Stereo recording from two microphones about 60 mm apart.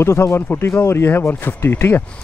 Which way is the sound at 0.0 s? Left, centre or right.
Left.